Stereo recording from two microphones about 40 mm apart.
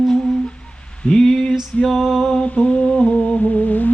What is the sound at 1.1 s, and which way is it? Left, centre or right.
Music, centre.